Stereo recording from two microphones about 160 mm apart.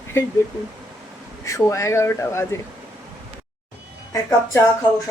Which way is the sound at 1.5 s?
20° left (ahead or behind).